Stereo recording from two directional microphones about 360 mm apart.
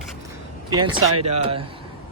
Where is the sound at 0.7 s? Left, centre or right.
Centre.